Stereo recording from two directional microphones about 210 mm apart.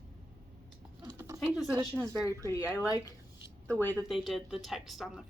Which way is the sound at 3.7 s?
10° left (ahead or behind).